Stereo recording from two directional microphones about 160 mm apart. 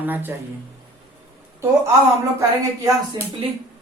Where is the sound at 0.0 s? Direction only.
10° right (ahead or behind).